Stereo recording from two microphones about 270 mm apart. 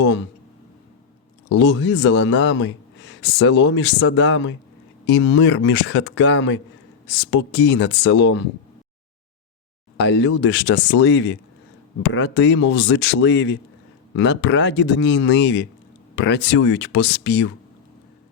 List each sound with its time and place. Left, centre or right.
0.0 s speech: left
1.5 s speech: left
10.0 s speech: left